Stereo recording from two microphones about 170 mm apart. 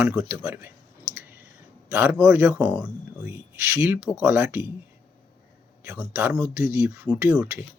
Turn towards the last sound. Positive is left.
turn(degrees=-15)  # may be behind; listen again after turning